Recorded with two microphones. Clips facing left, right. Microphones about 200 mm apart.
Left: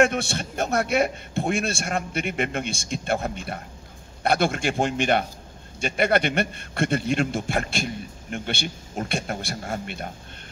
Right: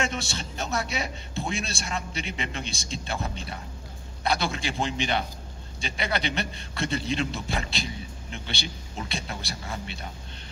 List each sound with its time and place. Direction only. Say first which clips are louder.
0.0 s a man's voice: left 9 dB; 60° left (ahead or behind)